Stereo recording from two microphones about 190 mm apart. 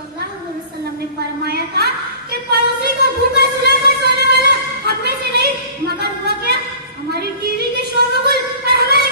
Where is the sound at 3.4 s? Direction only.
55° right (ahead or behind).